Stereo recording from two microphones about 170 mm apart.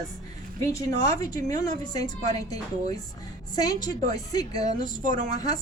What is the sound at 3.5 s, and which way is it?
Speech, 20° left (ahead or behind).